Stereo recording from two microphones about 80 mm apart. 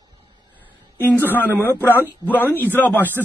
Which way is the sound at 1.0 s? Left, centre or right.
Left.